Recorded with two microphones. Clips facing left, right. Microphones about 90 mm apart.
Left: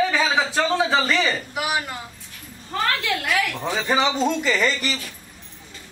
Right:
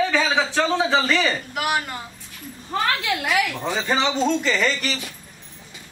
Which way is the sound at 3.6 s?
5° left (ahead or behind).